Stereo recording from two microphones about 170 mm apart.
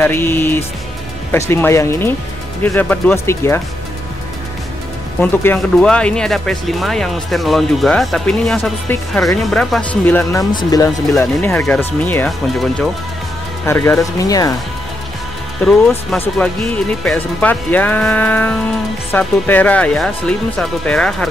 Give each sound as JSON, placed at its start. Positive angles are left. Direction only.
{"t": 0.0, "sound": "speech", "side_deg": 15}
{"t": 5.2, "sound": "speech", "side_deg": 10}
{"t": 10.6, "sound": "speech", "side_deg": 20}
{"t": 11.6, "sound": "speech", "side_deg": 10}
{"t": 12.3, "sound": "speech", "side_deg": 0}
{"t": 13.7, "sound": "speech", "side_deg": 15}
{"t": 16.2, "sound": "speech", "side_deg": 5}